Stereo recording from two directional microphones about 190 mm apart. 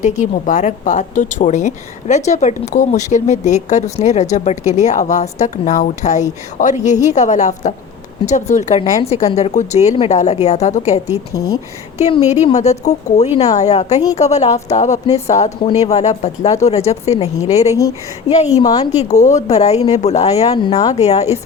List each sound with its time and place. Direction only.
0.0 s a woman's voice: 40° left (ahead or behind)
11.3 s speech: 20° left (ahead or behind)
11.9 s a woman's voice: 35° left (ahead or behind)
18.6 s speech: 20° left (ahead or behind)
18.9 s a woman's voice: 40° left (ahead or behind)
20.5 s speech: 20° left (ahead or behind)
21.0 s a woman's voice: 35° left (ahead or behind)